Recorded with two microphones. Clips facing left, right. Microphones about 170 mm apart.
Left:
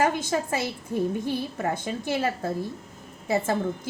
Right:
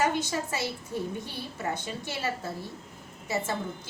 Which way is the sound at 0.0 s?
50° left (ahead or behind).